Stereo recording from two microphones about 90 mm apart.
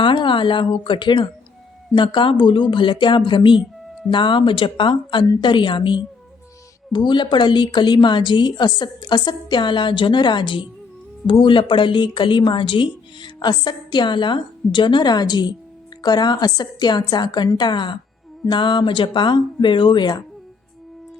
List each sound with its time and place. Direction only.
0.0 s a woman's voice: 65° left (ahead or behind)